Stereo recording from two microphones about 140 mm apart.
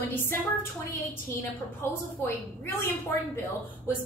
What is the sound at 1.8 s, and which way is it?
A woman's voice, 15° left (ahead or behind).